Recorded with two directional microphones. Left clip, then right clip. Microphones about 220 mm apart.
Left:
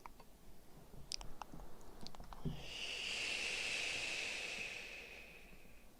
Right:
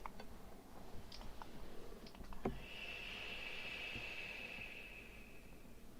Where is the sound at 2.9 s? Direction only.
90° left.